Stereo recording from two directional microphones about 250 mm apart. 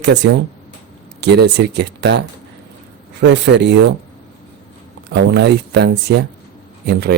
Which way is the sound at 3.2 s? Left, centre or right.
Right.